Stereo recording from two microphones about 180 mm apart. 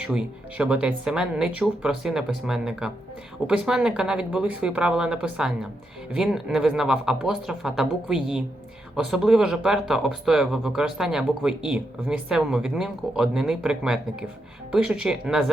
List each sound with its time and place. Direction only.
0.0 s speech: 5° right (ahead or behind)